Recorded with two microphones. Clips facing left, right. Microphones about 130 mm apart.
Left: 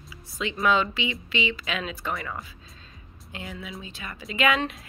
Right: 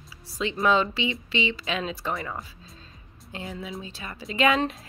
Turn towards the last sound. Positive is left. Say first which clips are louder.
# right 2 dB
turn(degrees=-30)  # may be behind; listen again after turning